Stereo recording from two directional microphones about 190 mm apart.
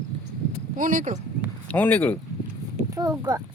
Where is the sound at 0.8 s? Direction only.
45° right (ahead or behind).